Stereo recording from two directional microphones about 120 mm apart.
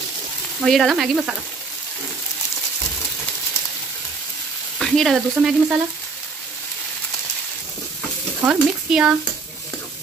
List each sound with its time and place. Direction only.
0.6 s frying: centre (ahead or behind)
4.7 s frying: centre (ahead or behind)
8.5 s speech: 10° right (ahead or behind)